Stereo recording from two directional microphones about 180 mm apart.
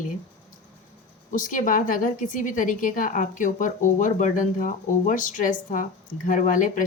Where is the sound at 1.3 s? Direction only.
50° left (ahead or behind).